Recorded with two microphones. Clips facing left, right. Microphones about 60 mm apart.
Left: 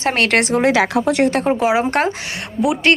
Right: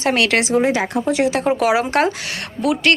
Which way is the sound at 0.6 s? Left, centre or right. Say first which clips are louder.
Left 3 dB; left.